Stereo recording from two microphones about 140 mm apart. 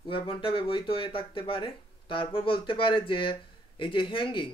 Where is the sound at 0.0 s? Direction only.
40° left (ahead or behind).